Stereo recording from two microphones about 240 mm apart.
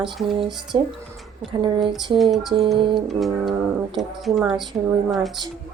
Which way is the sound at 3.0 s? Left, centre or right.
Centre.